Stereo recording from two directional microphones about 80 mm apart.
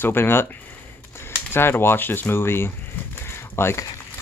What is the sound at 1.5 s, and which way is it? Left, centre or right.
Speech, left.